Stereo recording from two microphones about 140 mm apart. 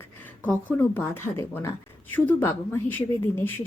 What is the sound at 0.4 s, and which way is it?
Speech, 15° left (ahead or behind).